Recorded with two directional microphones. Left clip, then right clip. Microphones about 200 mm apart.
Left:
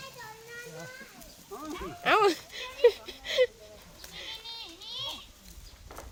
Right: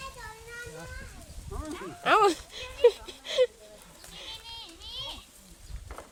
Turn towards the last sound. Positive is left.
turn(degrees=-10)  # may be behind; listen again after turning